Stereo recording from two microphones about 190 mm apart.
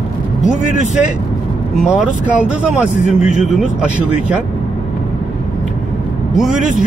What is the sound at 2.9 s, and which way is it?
Speech, 40° left (ahead or behind).